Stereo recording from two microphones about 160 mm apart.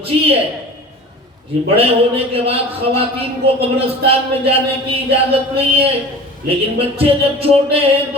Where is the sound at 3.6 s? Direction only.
35° right (ahead or behind).